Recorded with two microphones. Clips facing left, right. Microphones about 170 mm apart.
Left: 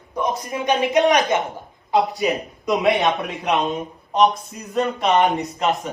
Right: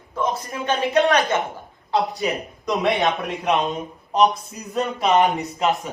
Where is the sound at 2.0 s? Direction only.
Centre (ahead or behind).